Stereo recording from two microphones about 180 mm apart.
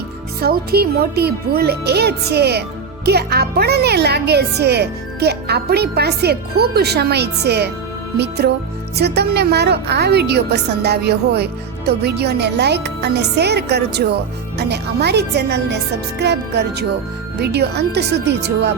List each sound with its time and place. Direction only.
0.4 s speech: 60° right (ahead or behind)
9.0 s speech: 65° right (ahead or behind)